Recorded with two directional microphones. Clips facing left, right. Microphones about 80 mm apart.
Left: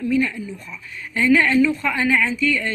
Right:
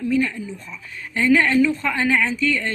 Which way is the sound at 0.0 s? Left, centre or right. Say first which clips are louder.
Even; right.